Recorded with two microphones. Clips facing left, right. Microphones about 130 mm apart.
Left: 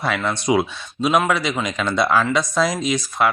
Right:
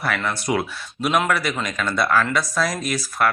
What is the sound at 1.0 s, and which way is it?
Speech, 5° left (ahead or behind).